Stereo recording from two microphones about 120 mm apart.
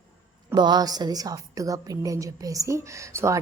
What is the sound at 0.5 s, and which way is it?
A woman's voice, 35° right (ahead or behind).